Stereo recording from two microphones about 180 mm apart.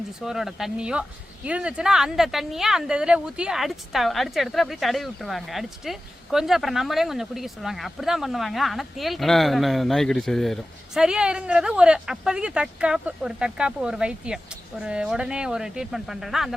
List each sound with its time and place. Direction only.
0.2 s speech: centre (ahead or behind)